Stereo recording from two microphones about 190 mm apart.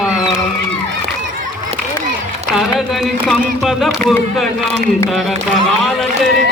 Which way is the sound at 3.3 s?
Centre (ahead or behind).